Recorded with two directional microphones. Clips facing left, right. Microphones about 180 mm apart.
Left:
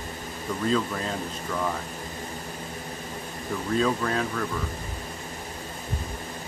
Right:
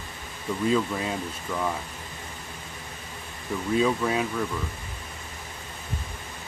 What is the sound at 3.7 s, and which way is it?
Speech, 10° right (ahead or behind).